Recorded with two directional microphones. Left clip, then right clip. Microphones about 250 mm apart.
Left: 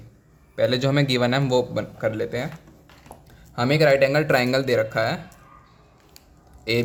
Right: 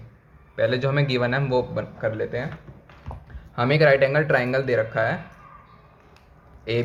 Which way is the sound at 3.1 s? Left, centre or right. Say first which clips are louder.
Right 3 dB; left.